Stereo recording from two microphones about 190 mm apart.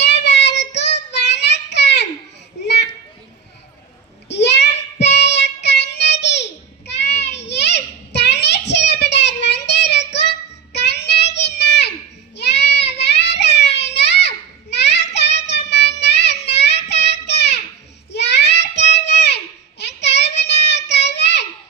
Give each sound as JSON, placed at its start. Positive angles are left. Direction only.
{"t": 0.0, "sound": "child singing", "side_deg": 65}
{"t": 2.6, "sound": "children playing", "side_deg": 65}
{"t": 4.3, "sound": "child singing", "side_deg": 65}
{"t": 19.0, "sound": "music", "side_deg": 65}
{"t": 19.8, "sound": "child singing", "side_deg": 65}